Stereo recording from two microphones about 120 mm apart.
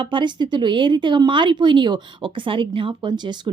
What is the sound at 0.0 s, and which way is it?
Speech, 40° right (ahead or behind).